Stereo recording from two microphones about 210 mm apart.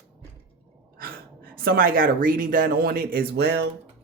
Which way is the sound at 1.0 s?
45° right (ahead or behind).